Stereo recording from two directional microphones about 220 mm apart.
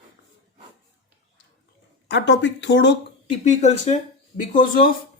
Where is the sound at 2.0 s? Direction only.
50° left (ahead or behind).